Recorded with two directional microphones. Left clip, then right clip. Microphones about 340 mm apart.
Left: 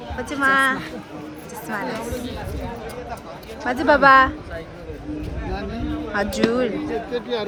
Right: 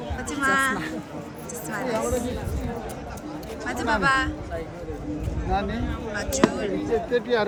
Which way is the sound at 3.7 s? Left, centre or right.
Centre.